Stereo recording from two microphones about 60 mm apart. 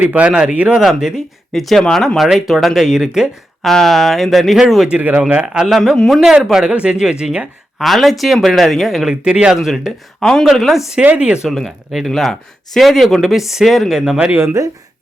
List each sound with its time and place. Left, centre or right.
0.0 s speech: right
0.8 s speech: centre
1.8 s speech: centre
2.1 s speech: centre
3.7 s speech: centre
4.9 s speech: right
5.6 s speech: centre
9.0 s speech: centre
10.2 s speech: centre
10.4 s speech: centre
11.0 s speech: right
11.4 s speech: centre